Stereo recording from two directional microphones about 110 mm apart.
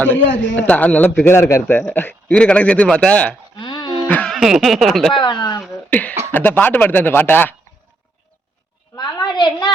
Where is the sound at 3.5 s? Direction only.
45° left (ahead or behind).